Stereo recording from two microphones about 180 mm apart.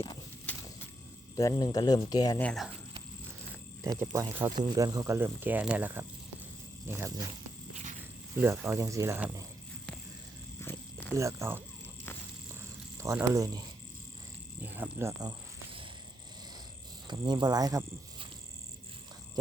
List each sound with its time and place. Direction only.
0.5 s a sound: 10° left (ahead or behind)
1.4 s speech: 20° left (ahead or behind)
2.4 s speech: centre (ahead or behind)
3.8 s speech: 15° right (ahead or behind)
8.4 s speech: 15° right (ahead or behind)
10.6 s cricket: 15° left (ahead or behind)
11.1 s speech: 15° right (ahead or behind)
13.0 s speech: 15° right (ahead or behind)
14.6 s cricket: 10° right (ahead or behind)
17.1 s speech: 25° right (ahead or behind)